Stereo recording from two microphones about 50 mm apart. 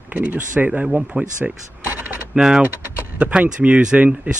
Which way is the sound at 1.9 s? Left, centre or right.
Right.